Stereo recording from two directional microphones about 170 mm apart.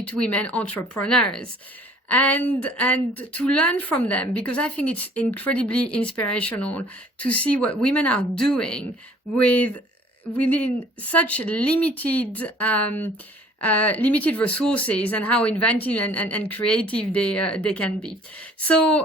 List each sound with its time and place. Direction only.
0.0 s speech: 5° left (ahead or behind)